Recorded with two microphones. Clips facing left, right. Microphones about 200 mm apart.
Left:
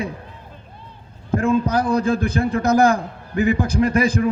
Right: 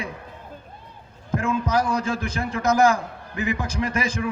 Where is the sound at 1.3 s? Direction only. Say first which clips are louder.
Left 5 dB; 35° left (ahead or behind).